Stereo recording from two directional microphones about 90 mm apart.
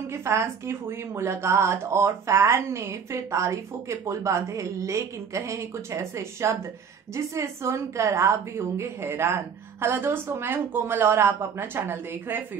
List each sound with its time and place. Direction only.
0.1 s a woman's voice: 30° right (ahead or behind)